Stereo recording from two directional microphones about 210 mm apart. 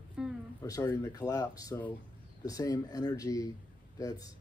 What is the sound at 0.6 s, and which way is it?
Speech, 15° left (ahead or behind).